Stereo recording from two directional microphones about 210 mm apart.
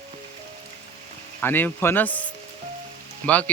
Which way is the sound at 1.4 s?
10° left (ahead or behind).